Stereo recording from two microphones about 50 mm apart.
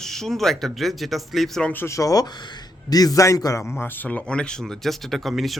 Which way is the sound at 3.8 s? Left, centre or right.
Left.